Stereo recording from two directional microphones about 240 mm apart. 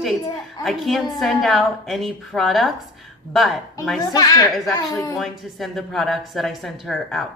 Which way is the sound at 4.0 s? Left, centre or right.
Centre.